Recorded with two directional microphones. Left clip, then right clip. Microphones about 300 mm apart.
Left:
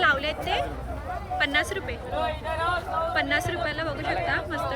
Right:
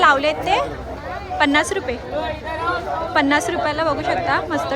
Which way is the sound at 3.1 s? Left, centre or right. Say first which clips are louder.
Right 10 dB; centre.